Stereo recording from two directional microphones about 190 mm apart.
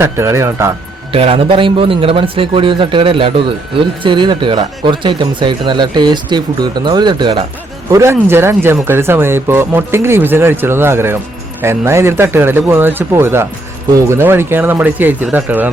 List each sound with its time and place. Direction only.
0.0 s speech: 15° right (ahead or behind)
1.1 s speech: 30° right (ahead or behind); by 15.7 s 10° right (ahead or behind)